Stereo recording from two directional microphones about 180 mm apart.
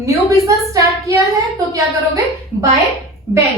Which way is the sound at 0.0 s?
20° right (ahead or behind).